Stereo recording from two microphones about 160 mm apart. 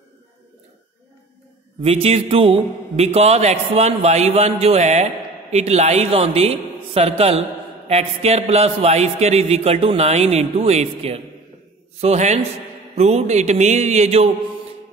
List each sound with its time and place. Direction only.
1.8 s speech: 40° right (ahead or behind)